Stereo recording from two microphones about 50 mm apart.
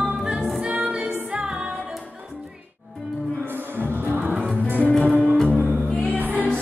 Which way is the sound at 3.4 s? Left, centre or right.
Right.